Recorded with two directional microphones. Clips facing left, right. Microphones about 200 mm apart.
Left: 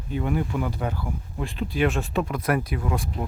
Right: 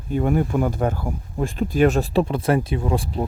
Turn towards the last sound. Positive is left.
turn(degrees=-30)  # may be behind; listen again after turning